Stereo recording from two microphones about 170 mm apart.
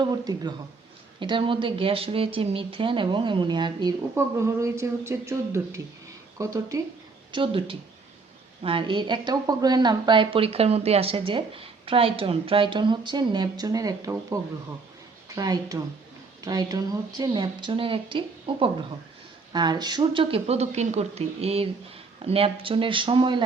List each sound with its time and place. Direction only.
0.0 s a woman's voice: 25° right (ahead or behind)
7.3 s a woman's voice: 30° right (ahead or behind)
15.4 s a woman's voice: 25° right (ahead or behind)